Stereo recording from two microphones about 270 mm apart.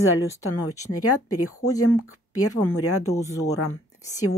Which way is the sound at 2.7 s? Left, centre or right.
Left.